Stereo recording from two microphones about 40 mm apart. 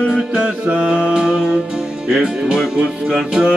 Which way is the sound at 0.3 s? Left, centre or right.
Right.